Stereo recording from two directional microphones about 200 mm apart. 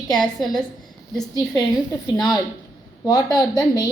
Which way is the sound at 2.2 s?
20° left (ahead or behind).